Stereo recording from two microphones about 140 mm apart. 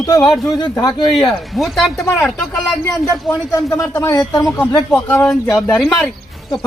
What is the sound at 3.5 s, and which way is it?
Speech, 25° left (ahead or behind).